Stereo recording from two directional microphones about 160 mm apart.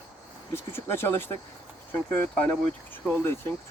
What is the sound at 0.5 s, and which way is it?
Speech, 15° left (ahead or behind).